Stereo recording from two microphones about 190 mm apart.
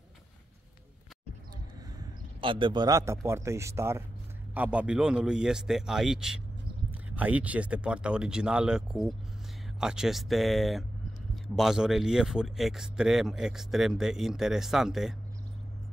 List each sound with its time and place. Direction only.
2.4 s speech: 25° right (ahead or behind); by 15.1 s centre (ahead or behind)